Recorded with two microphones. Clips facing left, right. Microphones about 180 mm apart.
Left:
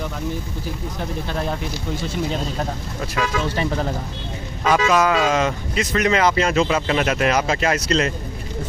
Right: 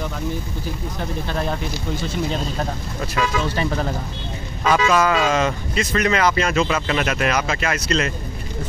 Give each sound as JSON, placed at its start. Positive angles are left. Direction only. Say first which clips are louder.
{"t": 1.2, "sound": "speech", "louder": "right 1 dB", "side_deg": 5}
{"t": 3.4, "sound": "speech", "louder": "even", "side_deg": 20}